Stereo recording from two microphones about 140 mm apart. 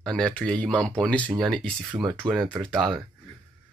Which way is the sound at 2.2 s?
30° right (ahead or behind).